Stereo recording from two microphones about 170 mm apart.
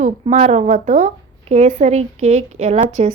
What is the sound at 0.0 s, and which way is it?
A woman's voice, 45° right (ahead or behind).